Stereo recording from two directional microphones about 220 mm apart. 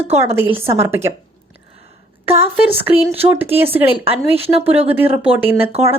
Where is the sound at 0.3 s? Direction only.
10° right (ahead or behind).